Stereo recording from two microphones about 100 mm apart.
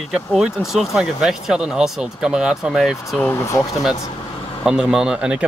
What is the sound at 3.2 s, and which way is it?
Speech, 25° left (ahead or behind).